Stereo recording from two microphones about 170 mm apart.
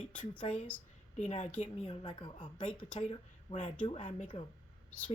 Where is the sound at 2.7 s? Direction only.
5° left (ahead or behind).